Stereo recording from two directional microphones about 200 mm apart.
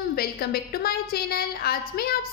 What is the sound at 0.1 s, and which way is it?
A woman's voice, 50° left (ahead or behind).